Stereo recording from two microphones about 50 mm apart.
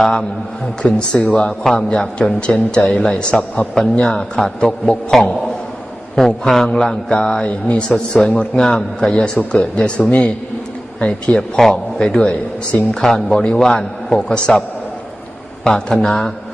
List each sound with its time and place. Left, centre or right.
0.8 s a man's voice: centre
11.0 s a man's voice: centre
15.6 s a man's voice: centre